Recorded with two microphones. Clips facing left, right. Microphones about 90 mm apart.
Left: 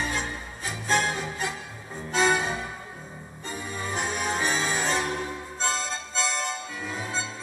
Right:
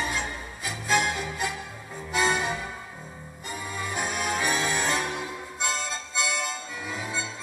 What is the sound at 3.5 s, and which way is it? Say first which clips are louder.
Music: even; 20° left (ahead or behind).